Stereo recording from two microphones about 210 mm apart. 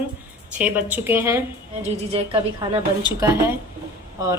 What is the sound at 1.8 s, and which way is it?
A woman's voice, 30° right (ahead or behind).